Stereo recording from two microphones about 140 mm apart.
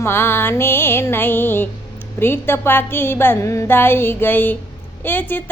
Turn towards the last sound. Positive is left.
turn(degrees=15)  # may be behind; listen again after turning